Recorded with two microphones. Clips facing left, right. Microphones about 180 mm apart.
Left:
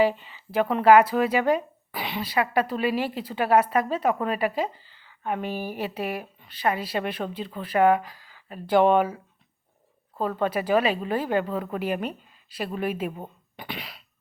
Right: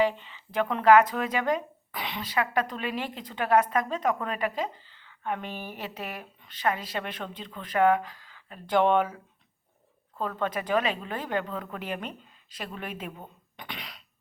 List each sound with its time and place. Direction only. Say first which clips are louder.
0.0 s a woman's voice: left 3 dB; 10° left (ahead or behind)
10.2 s speech: left 5 dB; 35° left (ahead or behind)
10.4 s a woman's voice: left 4 dB; 10° left (ahead or behind)
13.1 s speech: left 6 dB; 30° left (ahead or behind)
13.6 s cough: left 5 dB; 5° left (ahead or behind)